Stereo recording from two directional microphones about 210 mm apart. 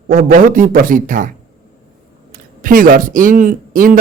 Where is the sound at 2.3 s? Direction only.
40° right (ahead or behind).